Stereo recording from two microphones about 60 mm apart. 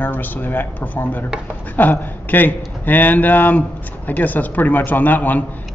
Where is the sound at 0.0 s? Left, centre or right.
Left.